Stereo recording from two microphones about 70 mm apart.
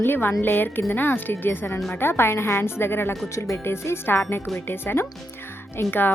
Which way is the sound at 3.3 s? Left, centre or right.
Left.